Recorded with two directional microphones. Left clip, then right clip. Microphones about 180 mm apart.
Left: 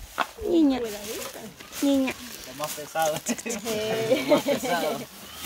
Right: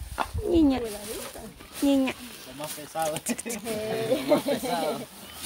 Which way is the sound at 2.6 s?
25° left (ahead or behind).